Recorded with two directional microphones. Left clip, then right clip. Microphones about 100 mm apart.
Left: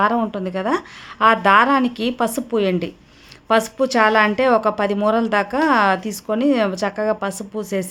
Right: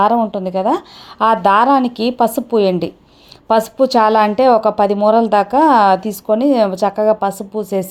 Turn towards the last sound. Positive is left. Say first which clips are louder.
# right 5 dB
turn(degrees=-20)  # may be behind; listen again after turning